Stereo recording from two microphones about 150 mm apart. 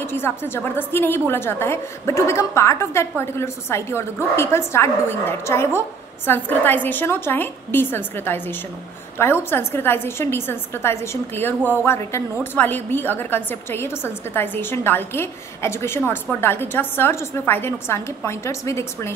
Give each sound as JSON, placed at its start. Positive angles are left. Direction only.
{"t": 0.0, "sound": "a woman's voice", "side_deg": 15}